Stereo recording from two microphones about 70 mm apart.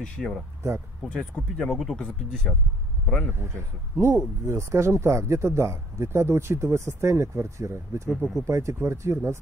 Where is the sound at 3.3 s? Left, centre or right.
Right.